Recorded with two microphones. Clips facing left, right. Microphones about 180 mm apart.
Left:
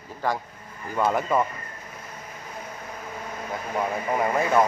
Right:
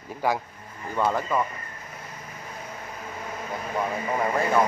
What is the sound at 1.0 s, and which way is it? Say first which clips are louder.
Speech: left 2 dB; 10° left (ahead or behind).